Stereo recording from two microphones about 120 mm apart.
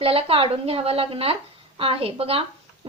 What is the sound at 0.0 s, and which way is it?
A woman's voice, 50° right (ahead or behind).